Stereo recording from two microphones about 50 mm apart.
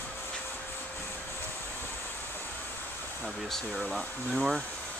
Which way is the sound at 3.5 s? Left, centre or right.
Centre.